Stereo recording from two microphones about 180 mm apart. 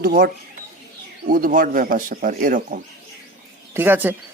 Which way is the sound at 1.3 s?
50° right (ahead or behind).